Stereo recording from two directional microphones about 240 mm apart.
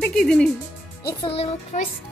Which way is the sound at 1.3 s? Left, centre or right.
Left.